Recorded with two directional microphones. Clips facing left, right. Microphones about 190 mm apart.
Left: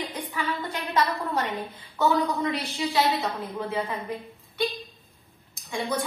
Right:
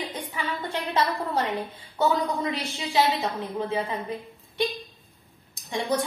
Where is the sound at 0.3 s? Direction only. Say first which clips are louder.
Left 1 dB; 25° right (ahead or behind).